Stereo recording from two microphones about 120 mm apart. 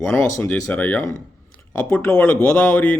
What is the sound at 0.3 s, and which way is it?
Speech, 25° left (ahead or behind).